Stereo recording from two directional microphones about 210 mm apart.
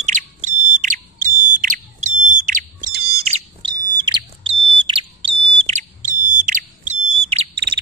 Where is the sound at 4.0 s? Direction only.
25° right (ahead or behind).